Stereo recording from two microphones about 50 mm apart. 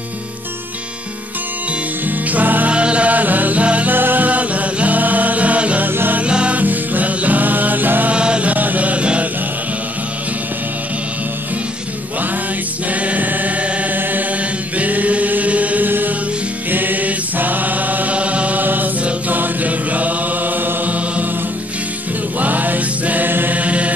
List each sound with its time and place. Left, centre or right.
2.0 s music: right
2.7 s music: right
3.9 s music: right
5.9 s music: right
6.2 s music: right
6.6 s music: right
8.1 s music: right
13.0 s music: right
14.8 s chant: right
22.4 s music: right
23.6 s mantra: right